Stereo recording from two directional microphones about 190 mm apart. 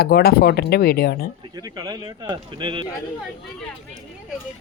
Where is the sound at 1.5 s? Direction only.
20° right (ahead or behind).